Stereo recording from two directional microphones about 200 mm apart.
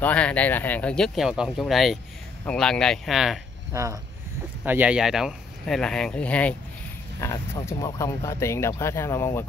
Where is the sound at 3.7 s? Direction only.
15° right (ahead or behind).